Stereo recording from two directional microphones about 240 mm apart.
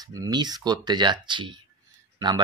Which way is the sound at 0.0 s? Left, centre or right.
Centre.